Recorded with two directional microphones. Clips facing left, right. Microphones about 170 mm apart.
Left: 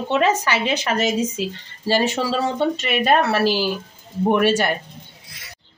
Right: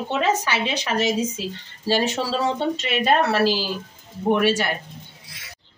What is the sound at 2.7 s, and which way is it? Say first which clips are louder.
A woman's voice: left 2 dB; 55° left (ahead or behind).